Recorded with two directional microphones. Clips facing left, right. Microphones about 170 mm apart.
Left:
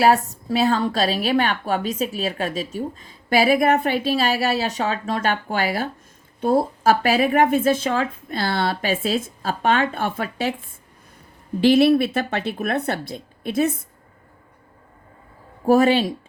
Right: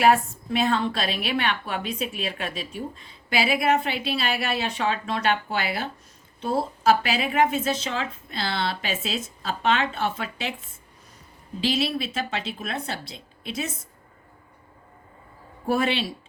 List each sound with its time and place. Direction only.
0.0 s a woman's voice: 35° left (ahead or behind)
11.6 s speech: 60° left (ahead or behind)
15.6 s speech: 45° left (ahead or behind)